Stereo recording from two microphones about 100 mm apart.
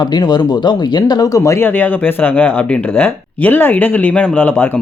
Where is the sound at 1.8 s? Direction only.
20° left (ahead or behind).